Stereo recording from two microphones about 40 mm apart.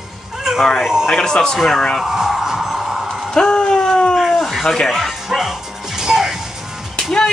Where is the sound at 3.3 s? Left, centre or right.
Centre.